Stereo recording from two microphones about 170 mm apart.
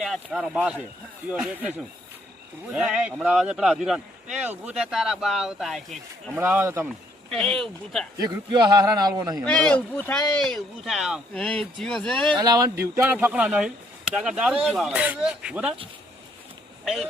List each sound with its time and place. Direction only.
0.0 s a man's voice: centre (ahead or behind)
2.7 s a man's voice: 5° right (ahead or behind)
6.4 s a man's voice: 15° right (ahead or behind)
7.3 s a man's voice: 5° left (ahead or behind)
8.2 s a man's voice: 25° right (ahead or behind)
9.4 s a man's voice: 5° left (ahead or behind)
12.3 s a man's voice: 20° right (ahead or behind)
13.0 s a man's voice: 10° right (ahead or behind)
16.8 s speech: centre (ahead or behind)